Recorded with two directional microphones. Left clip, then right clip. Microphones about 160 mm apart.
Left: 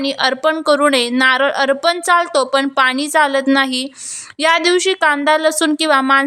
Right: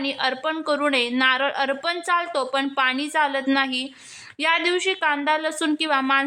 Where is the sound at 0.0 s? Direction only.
30° left (ahead or behind).